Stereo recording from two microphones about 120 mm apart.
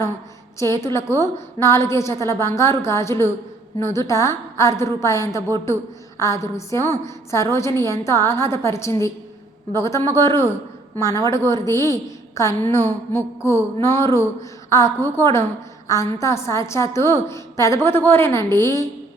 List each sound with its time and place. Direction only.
0.6 s a woman's voice: 25° left (ahead or behind)